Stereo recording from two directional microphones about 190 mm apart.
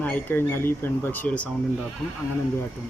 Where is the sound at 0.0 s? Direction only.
10° left (ahead or behind).